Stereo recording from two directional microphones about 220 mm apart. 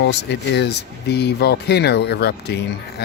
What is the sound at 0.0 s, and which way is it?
Speech, 50° left (ahead or behind).